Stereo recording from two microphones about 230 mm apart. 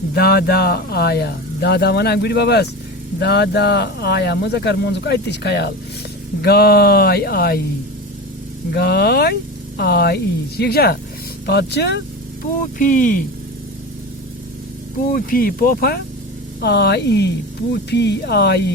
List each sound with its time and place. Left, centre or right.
0.1 s speech: left
8.7 s speech: left
12.8 s speech: left
15.1 s speech: left